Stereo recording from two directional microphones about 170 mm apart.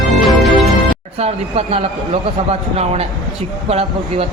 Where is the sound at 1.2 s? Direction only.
35° right (ahead or behind).